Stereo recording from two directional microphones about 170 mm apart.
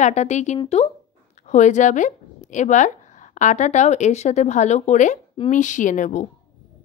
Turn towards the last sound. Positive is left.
turn(degrees=45)  # may be behind; listen again after turning